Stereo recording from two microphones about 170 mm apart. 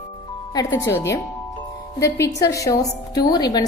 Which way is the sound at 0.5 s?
20° left (ahead or behind).